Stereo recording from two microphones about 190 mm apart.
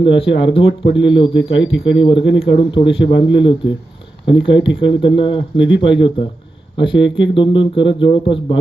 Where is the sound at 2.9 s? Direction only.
30° left (ahead or behind).